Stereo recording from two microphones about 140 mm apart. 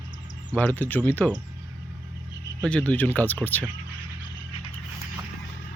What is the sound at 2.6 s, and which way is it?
Speech, 10° left (ahead or behind).